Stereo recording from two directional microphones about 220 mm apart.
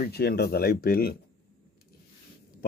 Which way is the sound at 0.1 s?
45° left (ahead or behind).